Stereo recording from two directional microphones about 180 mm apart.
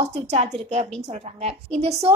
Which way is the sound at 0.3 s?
35° right (ahead or behind).